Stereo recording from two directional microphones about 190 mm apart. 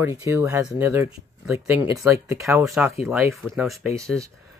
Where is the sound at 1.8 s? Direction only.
15° right (ahead or behind).